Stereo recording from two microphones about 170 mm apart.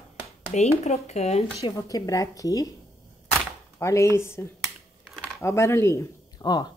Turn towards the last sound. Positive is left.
turn(degrees=25)  # may be behind; listen again after turning